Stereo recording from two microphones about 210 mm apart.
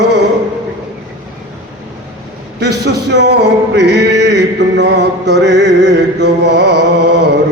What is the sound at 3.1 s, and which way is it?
Male singing, 55° right (ahead or behind).